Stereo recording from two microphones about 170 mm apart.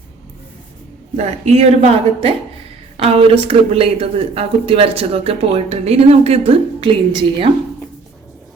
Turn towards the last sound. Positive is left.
turn(degrees=-30)  # may be behind; listen again after turning